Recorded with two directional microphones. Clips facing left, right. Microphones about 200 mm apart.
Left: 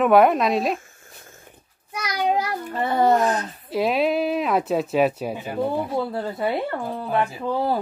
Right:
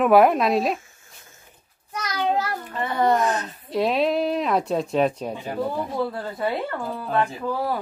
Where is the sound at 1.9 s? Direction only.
10° left (ahead or behind).